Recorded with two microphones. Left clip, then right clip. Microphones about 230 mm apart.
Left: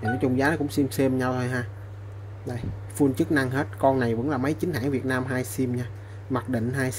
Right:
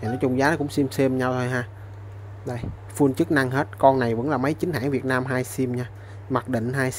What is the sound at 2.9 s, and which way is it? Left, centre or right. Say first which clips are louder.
Speech: right 2 dB; right.